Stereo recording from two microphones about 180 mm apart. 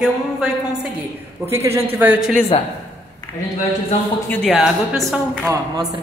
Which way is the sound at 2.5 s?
30° left (ahead or behind).